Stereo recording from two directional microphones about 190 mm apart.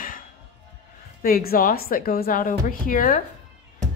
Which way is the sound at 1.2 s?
50° left (ahead or behind).